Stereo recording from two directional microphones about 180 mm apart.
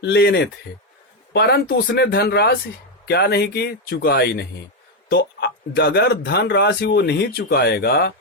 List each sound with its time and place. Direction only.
0.0 s speech: 70° left (ahead or behind)